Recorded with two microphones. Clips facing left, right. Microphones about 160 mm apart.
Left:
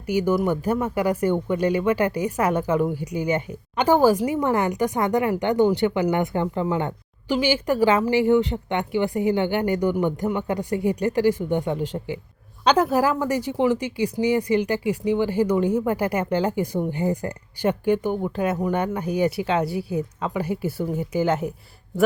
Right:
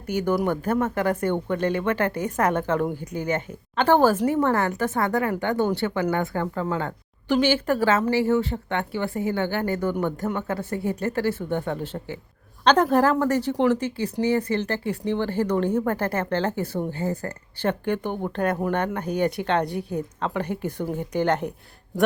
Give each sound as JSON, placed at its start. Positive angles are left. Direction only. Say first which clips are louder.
{"t": 0.1, "sound": "speech", "louder": "left 2 dB", "side_deg": 10}